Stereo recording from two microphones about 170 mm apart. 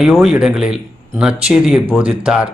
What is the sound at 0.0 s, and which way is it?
Speech, 5° right (ahead or behind).